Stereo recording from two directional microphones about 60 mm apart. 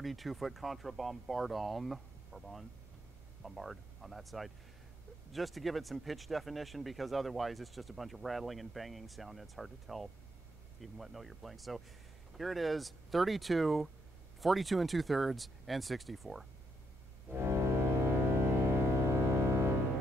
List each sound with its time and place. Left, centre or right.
0.0 s speech: centre
17.4 s music: right